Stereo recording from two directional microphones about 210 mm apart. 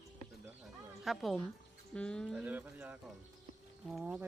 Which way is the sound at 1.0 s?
Centre (ahead or behind).